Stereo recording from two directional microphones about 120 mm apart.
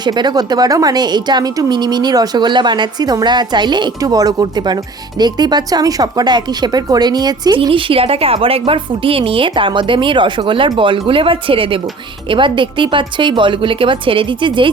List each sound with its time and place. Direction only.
0.0 s a woman's voice: 35° right (ahead or behind)